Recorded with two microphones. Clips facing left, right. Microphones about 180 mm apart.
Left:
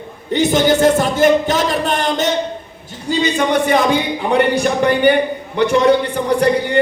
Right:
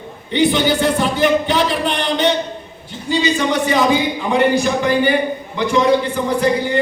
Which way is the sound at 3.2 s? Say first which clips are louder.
Left 3 dB; 55° left (ahead or behind).